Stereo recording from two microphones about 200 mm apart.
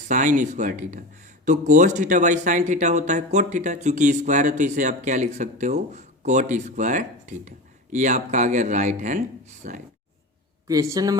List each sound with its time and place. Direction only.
0.1 s speech: 40° right (ahead or behind)
10.7 s speech: 15° right (ahead or behind)